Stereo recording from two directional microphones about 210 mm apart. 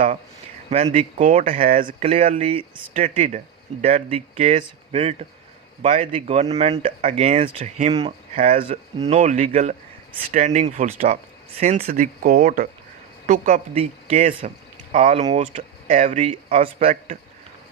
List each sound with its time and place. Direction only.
0.9 s speech: 30° right (ahead or behind)
1.9 s speech: 30° right (ahead or behind)